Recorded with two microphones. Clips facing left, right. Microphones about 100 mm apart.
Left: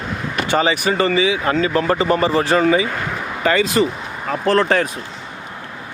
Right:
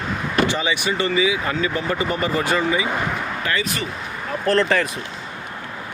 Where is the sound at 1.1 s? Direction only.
30° left (ahead or behind).